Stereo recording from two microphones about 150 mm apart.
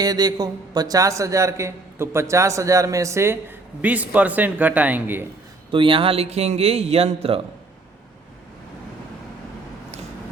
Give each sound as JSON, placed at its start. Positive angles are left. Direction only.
{"t": 0.0, "sound": "a man's voice", "side_deg": -25}
{"t": 5.7, "sound": "speech", "side_deg": -35}